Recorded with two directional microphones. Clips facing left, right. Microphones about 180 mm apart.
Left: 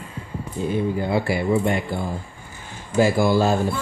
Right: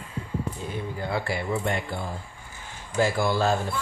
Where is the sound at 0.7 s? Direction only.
20° left (ahead or behind).